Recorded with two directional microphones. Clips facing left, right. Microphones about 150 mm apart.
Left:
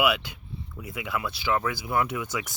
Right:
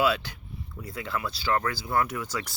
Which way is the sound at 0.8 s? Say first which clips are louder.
Left 1 dB; 15° left (ahead or behind).